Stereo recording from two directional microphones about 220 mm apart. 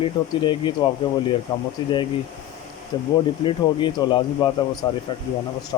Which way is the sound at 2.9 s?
20° left (ahead or behind).